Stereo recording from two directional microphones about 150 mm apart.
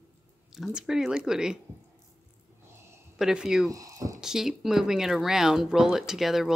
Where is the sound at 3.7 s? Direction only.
20° right (ahead or behind).